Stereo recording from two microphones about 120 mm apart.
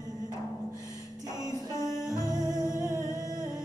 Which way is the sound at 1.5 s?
25° left (ahead or behind).